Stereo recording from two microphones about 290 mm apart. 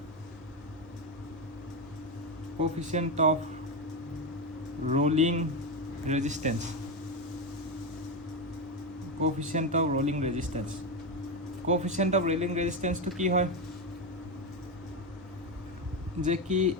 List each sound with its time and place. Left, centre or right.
2.9 s speech: right
4.9 s speech: right
9.2 s speech: right
11.7 s speech: right
16.2 s speech: right